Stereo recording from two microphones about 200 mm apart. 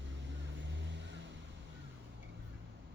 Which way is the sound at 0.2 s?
65° right (ahead or behind).